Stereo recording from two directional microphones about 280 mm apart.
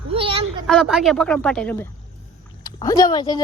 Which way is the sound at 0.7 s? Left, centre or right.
Centre.